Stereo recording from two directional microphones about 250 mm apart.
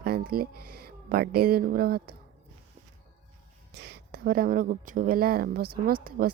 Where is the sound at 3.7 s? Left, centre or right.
Right.